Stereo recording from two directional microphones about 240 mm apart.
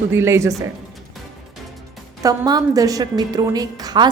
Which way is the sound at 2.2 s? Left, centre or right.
Centre.